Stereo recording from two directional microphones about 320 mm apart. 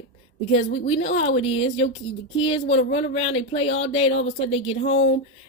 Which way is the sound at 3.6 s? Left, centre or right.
Left.